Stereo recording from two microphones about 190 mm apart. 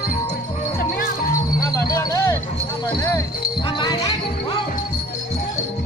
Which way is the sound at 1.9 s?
20° left (ahead or behind).